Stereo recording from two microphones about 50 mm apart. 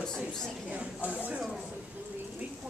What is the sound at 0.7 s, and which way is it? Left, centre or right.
Speech, right.